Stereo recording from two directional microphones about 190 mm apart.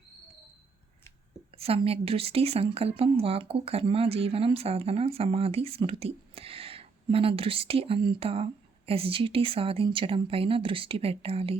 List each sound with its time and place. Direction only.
1.5 s a woman's voice: 30° right (ahead or behind)